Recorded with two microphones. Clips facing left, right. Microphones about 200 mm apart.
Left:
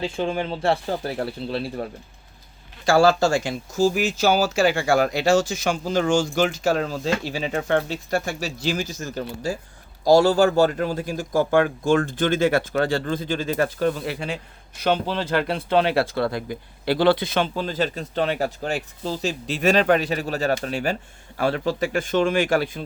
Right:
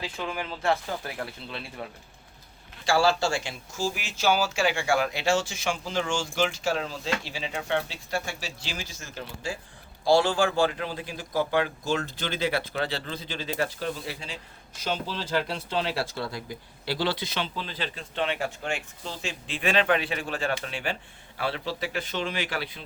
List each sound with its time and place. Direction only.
0.0 s speech: 30° left (ahead or behind); by 22.8 s 45° left (ahead or behind)